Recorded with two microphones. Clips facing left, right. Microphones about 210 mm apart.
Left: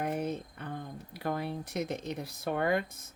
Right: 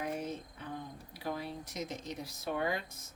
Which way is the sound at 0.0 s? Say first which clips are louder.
Left 5 dB; 60° left (ahead or behind).